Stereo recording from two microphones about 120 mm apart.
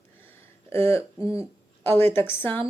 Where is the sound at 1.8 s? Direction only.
15° left (ahead or behind).